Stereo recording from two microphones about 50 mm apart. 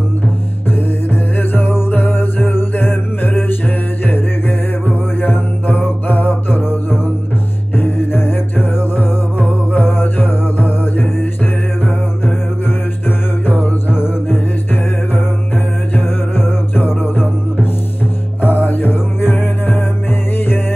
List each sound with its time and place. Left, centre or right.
1.5 s music: left
13.5 s music: left
15.9 s music: left